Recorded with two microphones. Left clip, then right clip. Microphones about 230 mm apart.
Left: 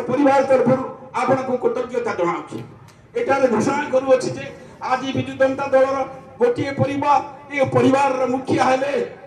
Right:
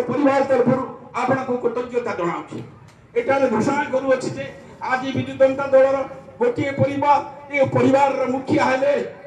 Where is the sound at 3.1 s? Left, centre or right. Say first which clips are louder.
Left 1 dB; left.